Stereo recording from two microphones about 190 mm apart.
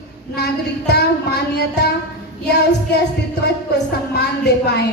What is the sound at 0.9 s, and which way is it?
Speech, 60° left (ahead or behind).